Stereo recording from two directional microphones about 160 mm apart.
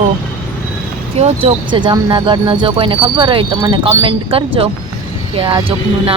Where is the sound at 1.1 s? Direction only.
40° right (ahead or behind).